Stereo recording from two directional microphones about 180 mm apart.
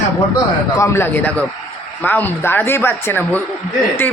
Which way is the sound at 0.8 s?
15° left (ahead or behind).